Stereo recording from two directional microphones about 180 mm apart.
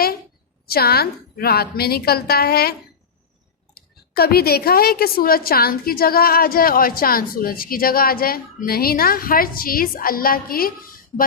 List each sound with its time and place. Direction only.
0.7 s a woman's voice: 60° left (ahead or behind)
3.8 s a woman's voice: 60° left (ahead or behind)